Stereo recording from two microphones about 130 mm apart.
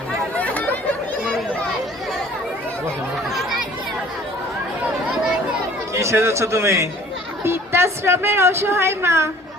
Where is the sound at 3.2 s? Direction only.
Centre (ahead or behind).